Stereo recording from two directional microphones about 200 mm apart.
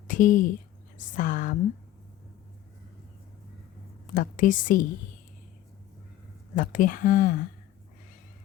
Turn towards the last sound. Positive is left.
turn(degrees=45)  # may be behind; listen again after turning